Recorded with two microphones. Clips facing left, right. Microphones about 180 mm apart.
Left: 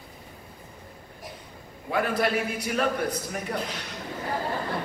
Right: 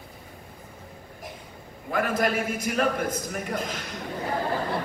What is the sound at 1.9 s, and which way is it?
A man's voice, 45° right (ahead or behind).